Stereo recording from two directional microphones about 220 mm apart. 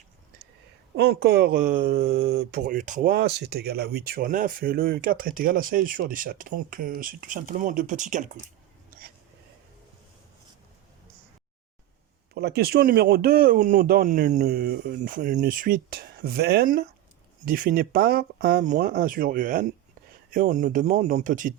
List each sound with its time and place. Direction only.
0.9 s speech: 45° right (ahead or behind)
8.9 s a sound: 45° right (ahead or behind)
12.3 s speech: 45° right (ahead or behind)
14.4 s speech: 45° right (ahead or behind)